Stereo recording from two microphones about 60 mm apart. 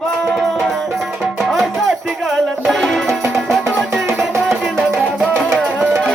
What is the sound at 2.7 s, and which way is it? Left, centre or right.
Music, centre.